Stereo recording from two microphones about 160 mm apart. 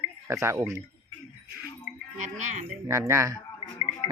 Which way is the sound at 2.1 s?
50° right (ahead or behind).